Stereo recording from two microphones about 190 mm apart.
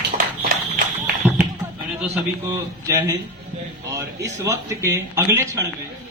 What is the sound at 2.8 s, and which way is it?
A man's voice, 15° right (ahead or behind).